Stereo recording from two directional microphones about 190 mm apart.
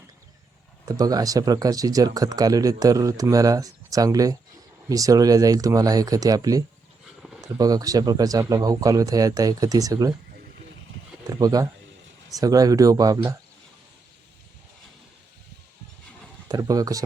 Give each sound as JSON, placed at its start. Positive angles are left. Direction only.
{"t": 0.9, "sound": "speech", "side_deg": -20}
{"t": 11.3, "sound": "speech", "side_deg": -20}
{"t": 16.5, "sound": "speech", "side_deg": -20}